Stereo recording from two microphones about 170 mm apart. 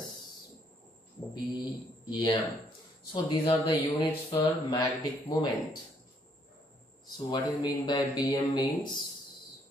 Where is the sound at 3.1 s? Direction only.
25° left (ahead or behind).